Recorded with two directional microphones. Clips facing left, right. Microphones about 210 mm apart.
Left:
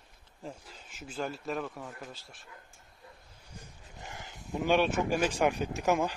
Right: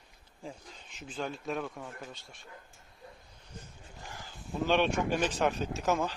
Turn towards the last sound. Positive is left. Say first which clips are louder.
# left 2 dB
turn(degrees=15)  # may be behind; listen again after turning